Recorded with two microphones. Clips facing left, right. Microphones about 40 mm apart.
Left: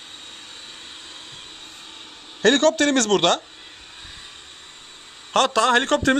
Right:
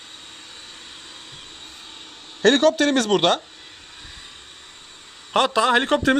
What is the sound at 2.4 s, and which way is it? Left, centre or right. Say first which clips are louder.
Speech: right 1 dB; centre.